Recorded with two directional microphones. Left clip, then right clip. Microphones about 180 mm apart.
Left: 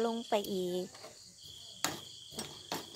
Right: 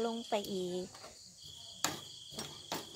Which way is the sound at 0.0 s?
30° left (ahead or behind).